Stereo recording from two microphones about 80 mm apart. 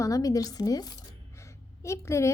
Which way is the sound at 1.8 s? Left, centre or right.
Left.